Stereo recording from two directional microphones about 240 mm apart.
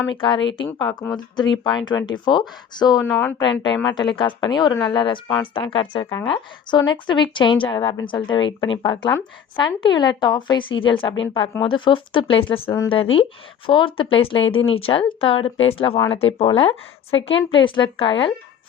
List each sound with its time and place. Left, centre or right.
0.2 s speech: centre